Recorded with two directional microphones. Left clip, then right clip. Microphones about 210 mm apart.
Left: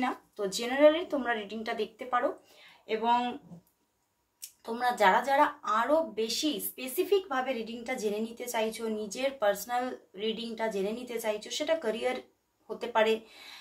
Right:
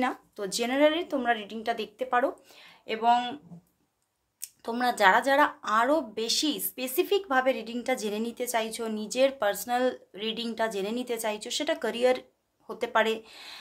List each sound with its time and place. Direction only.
0.0 s speech: 45° right (ahead or behind)
2.9 s speech: 55° right (ahead or behind)
4.4 s speech: 55° right (ahead or behind)